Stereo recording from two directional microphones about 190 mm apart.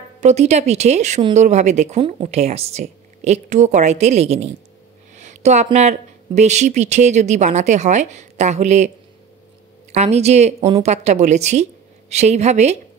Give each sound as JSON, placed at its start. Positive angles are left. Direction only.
{"t": 0.2, "sound": "speech", "side_deg": -35}
{"t": 9.9, "sound": "speech", "side_deg": -35}